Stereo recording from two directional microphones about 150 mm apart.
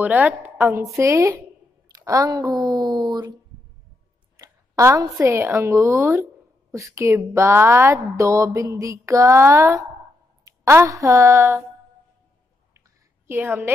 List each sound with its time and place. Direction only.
0.0 s a woman's voice: 10° right (ahead or behind); by 3.3 s 30° right (ahead or behind)
4.4 s a woman's voice: 20° right (ahead or behind)
13.3 s a woman's voice: 15° right (ahead or behind)